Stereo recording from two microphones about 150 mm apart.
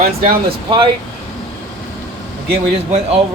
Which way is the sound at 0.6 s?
35° right (ahead or behind).